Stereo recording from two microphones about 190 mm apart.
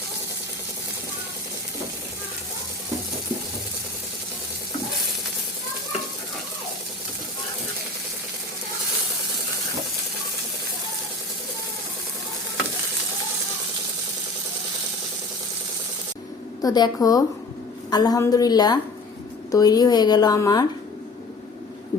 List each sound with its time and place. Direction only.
16.6 s a woman's voice: 20° left (ahead or behind)